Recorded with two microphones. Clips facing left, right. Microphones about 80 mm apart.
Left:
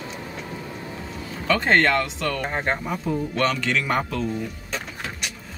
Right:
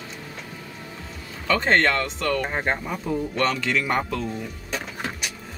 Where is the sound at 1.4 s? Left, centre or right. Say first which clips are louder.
Left 1 dB; centre.